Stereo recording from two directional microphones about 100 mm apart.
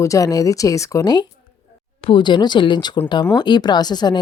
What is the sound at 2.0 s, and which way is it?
Speech, 55° left (ahead or behind).